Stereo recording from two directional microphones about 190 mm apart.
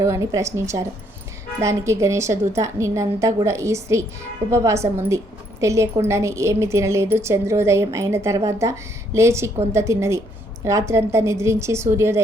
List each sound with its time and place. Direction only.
0.0 s a woman's voice: 15° right (ahead or behind)